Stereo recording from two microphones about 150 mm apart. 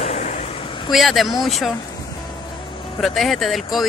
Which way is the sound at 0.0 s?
45° left (ahead or behind).